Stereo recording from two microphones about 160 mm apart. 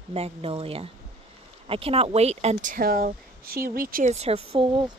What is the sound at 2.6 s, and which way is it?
Speech, 65° right (ahead or behind).